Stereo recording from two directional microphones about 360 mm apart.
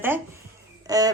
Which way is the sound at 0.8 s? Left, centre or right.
Centre.